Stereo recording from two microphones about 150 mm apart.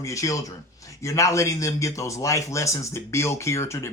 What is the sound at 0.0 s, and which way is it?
Speech, 20° left (ahead or behind).